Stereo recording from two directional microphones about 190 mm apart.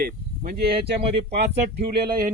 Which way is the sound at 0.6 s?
30° right (ahead or behind).